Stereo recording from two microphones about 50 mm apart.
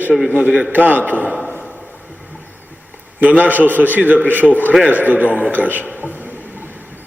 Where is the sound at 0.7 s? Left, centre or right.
Right.